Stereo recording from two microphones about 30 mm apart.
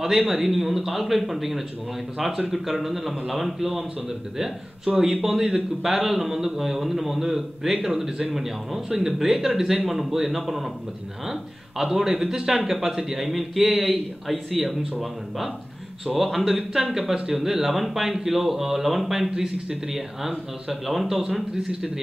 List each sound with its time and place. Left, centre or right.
0.3 s a man's voice: centre
11.8 s a man's voice: centre
19.3 s a man's voice: centre